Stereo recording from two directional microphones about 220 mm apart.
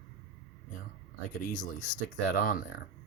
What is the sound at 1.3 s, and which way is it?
Speech, 40° left (ahead or behind).